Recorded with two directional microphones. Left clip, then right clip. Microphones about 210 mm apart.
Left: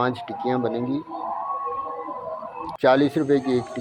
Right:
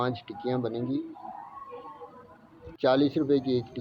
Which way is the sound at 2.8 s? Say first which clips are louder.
Left 6 dB; 20° left (ahead or behind).